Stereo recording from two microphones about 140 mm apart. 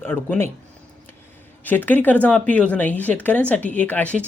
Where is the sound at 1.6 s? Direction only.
10° left (ahead or behind).